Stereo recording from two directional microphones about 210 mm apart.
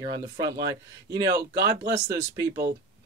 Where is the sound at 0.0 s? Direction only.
20° right (ahead or behind).